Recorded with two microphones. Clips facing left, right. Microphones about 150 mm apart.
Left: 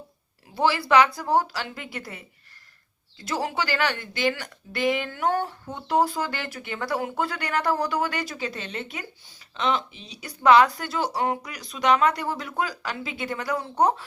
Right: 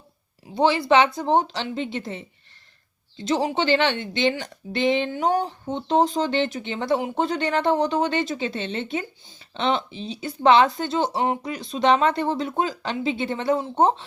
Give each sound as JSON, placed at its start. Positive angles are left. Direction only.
{"t": 0.5, "sound": "speech", "side_deg": -20}